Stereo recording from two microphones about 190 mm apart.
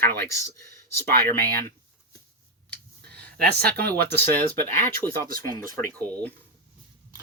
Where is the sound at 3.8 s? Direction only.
10° left (ahead or behind).